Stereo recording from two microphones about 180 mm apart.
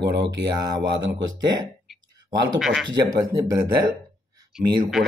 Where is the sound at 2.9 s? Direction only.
20° right (ahead or behind).